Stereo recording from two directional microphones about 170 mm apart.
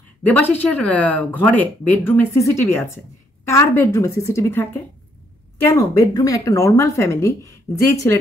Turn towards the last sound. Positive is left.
turn(degrees=20)  # may be behind; listen again after turning